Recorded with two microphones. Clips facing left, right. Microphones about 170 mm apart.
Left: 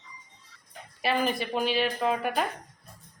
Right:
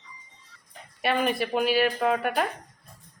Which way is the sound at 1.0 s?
Centre (ahead or behind).